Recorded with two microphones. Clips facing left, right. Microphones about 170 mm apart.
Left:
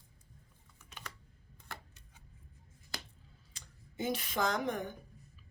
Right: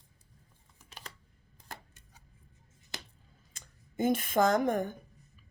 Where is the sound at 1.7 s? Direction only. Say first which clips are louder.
Right 2 dB; 40° right (ahead or behind).